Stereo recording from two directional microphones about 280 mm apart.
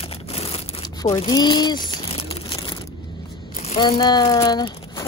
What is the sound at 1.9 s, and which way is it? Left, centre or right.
Crumpling, centre.